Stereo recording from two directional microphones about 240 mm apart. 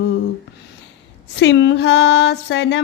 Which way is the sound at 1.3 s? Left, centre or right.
Left.